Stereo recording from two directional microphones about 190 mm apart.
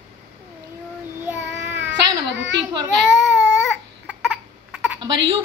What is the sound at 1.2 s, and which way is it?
Child singing, 10° right (ahead or behind).